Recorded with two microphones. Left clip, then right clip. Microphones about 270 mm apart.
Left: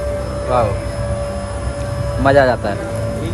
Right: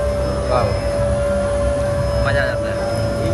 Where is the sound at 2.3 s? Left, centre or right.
Centre.